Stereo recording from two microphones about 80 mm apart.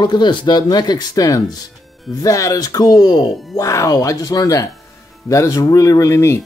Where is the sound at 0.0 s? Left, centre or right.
Left.